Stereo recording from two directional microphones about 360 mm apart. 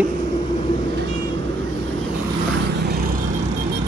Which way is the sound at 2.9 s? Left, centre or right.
Right.